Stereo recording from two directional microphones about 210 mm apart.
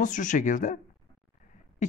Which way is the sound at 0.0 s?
35° left (ahead or behind).